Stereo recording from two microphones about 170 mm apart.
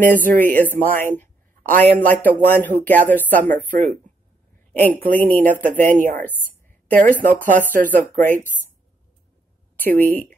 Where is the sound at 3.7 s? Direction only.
55° right (ahead or behind).